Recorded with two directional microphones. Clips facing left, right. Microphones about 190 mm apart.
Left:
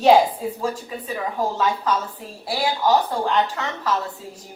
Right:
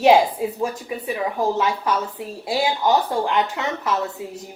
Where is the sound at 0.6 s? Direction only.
15° right (ahead or behind).